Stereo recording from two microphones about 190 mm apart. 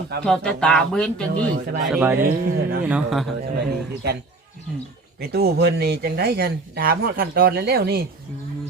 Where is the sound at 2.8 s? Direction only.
5° right (ahead or behind).